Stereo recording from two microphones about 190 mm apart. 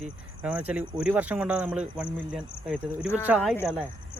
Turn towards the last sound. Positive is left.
turn(degrees=-5)  # may be behind; listen again after turning